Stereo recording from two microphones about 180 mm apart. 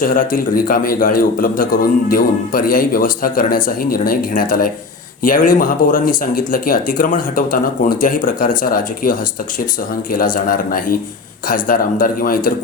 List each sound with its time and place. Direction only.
0.0 s a man's voice: 50° left (ahead or behind)